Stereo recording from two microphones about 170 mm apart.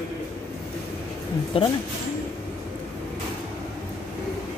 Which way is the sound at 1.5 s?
30° left (ahead or behind).